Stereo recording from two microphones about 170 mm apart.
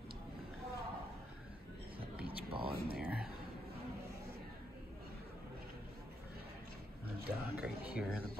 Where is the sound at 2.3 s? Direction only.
30° right (ahead or behind).